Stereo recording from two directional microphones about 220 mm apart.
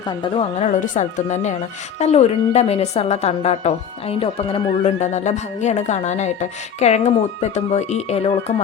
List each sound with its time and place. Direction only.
0.2 s a woman's voice: 25° left (ahead or behind)